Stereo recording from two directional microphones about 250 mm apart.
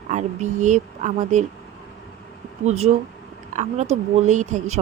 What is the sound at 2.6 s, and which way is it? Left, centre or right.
A woman's voice, right.